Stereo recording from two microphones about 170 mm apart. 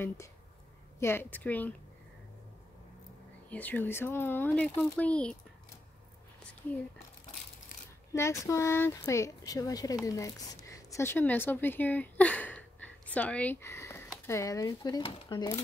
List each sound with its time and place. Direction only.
0.9 s speech: 15° left (ahead or behind)
3.4 s speech: 10° left (ahead or behind)
8.1 s speech: 15° left (ahead or behind)